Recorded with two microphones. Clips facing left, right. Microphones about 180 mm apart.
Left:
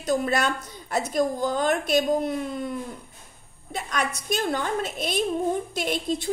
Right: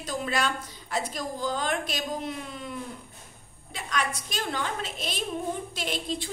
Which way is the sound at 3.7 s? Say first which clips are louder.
Left 2 dB; 45° left (ahead or behind).